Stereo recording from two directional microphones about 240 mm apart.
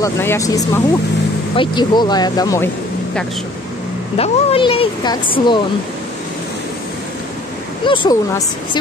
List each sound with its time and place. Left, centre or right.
0.0 s speech: centre
4.2 s speech: left
7.8 s speech: centre